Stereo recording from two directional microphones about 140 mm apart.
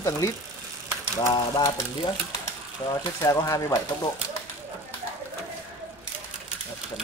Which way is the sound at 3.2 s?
20° left (ahead or behind).